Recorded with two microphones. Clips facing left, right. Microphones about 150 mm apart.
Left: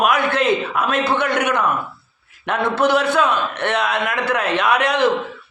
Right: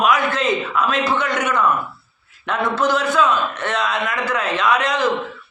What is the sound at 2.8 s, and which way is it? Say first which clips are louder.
A man's voice: left 2 dB; 60° left (ahead or behind).